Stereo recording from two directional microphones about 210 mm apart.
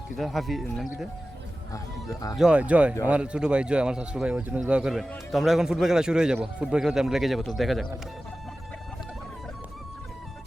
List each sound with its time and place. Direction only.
0.2 s speech: centre (ahead or behind)
1.7 s speech: 15° left (ahead or behind)
2.4 s speech: 5° right (ahead or behind)